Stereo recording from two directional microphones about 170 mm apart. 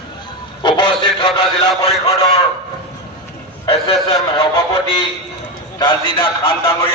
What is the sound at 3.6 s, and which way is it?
Speech, 35° left (ahead or behind).